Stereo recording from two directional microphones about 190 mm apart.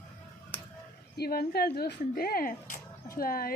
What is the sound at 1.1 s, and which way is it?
Speech, 55° left (ahead or behind).